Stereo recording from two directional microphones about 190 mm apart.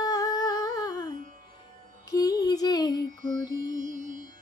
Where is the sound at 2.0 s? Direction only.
20° left (ahead or behind).